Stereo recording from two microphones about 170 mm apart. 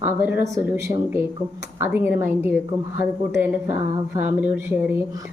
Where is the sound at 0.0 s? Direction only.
10° right (ahead or behind).